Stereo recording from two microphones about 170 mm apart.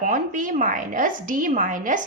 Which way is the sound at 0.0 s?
50° right (ahead or behind).